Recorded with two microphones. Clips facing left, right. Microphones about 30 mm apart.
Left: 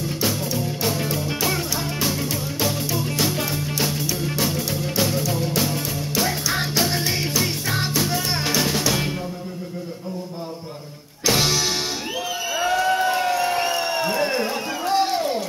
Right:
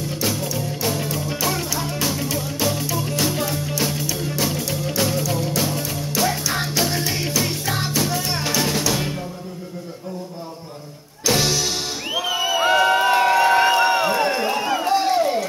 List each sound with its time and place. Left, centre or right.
0.2 s music: centre
11.2 s music: centre
12.6 s crowd: right
14.2 s run: centre
14.9 s a sound: centre